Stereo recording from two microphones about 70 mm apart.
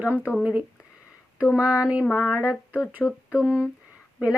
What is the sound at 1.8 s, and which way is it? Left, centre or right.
Speech, centre.